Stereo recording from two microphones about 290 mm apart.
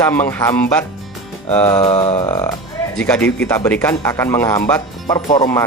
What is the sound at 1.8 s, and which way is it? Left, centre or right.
Speech, centre.